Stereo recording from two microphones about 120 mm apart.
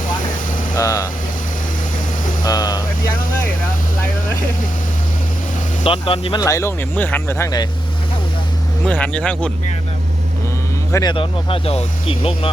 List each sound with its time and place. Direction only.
0.8 s speech: 30° left (ahead or behind)
2.4 s a sound: 35° left (ahead or behind)
5.8 s speech: 50° left (ahead or behind)
6.4 s speech: 25° left (ahead or behind)
8.8 s speech: 10° left (ahead or behind)
11.0 s speech: 45° left (ahead or behind)